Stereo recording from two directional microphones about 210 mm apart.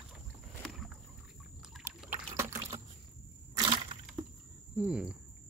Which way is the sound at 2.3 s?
15° right (ahead or behind).